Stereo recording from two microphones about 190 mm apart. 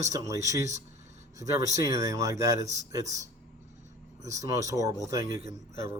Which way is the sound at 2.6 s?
35° right (ahead or behind).